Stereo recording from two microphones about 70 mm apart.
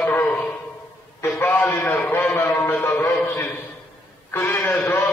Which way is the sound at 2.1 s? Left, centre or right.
Left.